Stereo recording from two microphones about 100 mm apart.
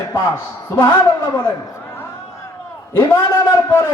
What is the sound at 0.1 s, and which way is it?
A man's voice, 25° left (ahead or behind).